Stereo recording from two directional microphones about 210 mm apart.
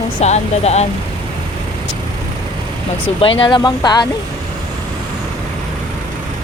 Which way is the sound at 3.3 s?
20° left (ahead or behind).